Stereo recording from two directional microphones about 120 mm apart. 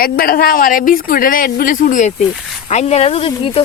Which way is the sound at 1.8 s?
90° left.